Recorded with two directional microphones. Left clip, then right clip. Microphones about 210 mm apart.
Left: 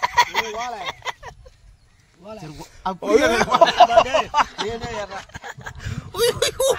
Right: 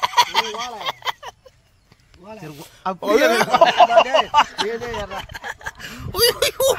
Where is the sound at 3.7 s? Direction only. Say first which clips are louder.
Right 1 dB; 5° right (ahead or behind).